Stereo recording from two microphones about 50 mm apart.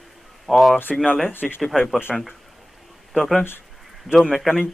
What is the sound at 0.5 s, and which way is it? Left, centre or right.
Speech, centre.